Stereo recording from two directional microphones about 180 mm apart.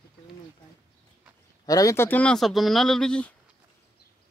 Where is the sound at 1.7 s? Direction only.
20° left (ahead or behind).